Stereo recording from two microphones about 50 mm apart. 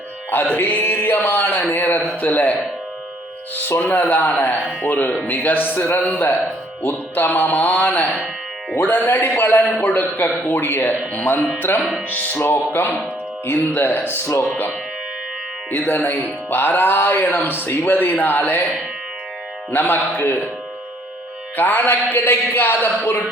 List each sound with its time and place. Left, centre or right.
0.3 s speech: left
3.7 s speech: left
4.2 s speech: left
11.8 s music: centre
12.4 s speech: left
15.7 s speech: left
19.7 s speech: left
21.5 s speech: left